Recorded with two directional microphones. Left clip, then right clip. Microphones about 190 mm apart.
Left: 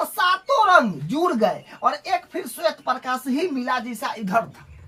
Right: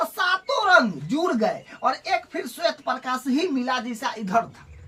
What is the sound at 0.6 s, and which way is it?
A woman's voice, 20° left (ahead or behind).